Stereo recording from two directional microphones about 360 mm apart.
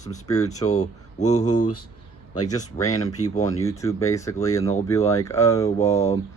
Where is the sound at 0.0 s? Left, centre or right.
Centre.